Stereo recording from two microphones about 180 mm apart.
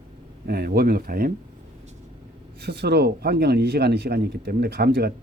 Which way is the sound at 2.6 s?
65° right (ahead or behind).